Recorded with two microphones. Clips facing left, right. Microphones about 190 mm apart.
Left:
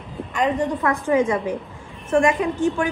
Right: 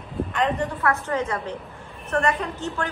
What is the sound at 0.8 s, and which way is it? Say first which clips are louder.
A woman's voice: left 5 dB; 15° left (ahead or behind).